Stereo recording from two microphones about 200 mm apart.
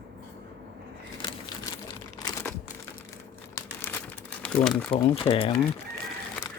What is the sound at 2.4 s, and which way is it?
Crumpling, 10° left (ahead or behind).